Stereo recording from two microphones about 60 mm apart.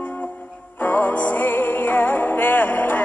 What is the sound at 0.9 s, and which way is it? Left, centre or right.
Music, left.